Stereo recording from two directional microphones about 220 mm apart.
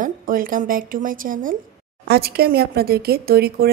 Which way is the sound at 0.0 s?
40° right (ahead or behind).